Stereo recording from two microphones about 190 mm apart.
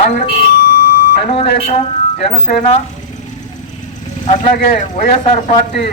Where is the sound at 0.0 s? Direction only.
40° left (ahead or behind).